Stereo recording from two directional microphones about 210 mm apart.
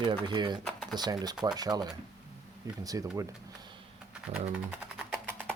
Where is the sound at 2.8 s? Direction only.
15° right (ahead or behind).